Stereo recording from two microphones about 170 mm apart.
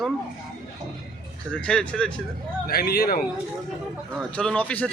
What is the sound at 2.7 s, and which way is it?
Speech, 60° left (ahead or behind).